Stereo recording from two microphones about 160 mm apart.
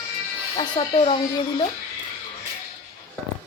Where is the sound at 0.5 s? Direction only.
35° left (ahead or behind).